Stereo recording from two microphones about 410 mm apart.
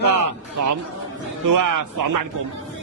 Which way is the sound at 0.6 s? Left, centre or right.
Right.